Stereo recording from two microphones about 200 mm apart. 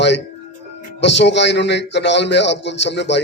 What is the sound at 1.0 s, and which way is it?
A man's voice, 60° left (ahead or behind).